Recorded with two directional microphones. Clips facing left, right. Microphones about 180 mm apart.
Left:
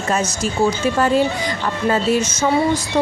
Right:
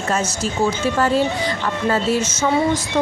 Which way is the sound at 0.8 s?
15° left (ahead or behind).